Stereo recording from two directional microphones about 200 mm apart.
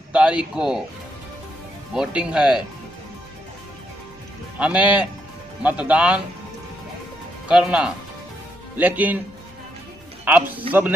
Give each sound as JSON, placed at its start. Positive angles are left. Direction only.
{"t": 0.1, "sound": "speech", "side_deg": -5}
{"t": 2.0, "sound": "speech", "side_deg": -5}
{"t": 4.6, "sound": "speech", "side_deg": -5}
{"t": 7.4, "sound": "speech", "side_deg": -5}
{"t": 10.3, "sound": "speech", "side_deg": -10}